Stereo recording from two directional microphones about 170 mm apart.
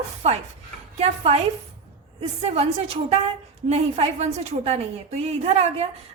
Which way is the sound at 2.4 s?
35° right (ahead or behind).